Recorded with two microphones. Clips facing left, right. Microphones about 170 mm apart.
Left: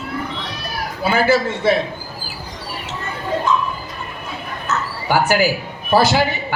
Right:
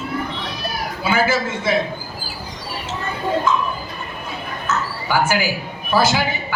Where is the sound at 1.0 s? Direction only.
35° left (ahead or behind).